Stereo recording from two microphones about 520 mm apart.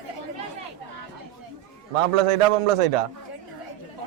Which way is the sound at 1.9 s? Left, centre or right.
Right.